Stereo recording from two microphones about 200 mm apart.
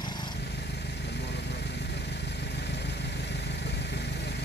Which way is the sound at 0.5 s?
55° left (ahead or behind).